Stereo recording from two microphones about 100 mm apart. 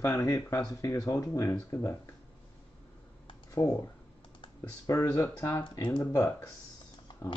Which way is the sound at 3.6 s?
25° left (ahead or behind).